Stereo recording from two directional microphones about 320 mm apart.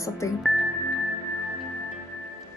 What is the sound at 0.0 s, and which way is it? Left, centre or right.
Speech, centre.